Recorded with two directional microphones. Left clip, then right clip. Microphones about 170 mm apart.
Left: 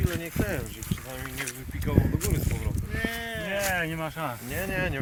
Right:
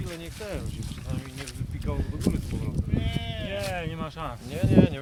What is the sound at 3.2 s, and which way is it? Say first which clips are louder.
Sheep: left 3 dB; 50° right (ahead or behind).